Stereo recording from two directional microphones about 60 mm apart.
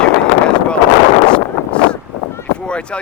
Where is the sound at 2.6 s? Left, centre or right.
Centre.